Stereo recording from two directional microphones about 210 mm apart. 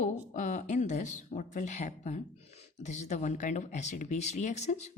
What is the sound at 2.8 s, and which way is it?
Speech, 35° left (ahead or behind).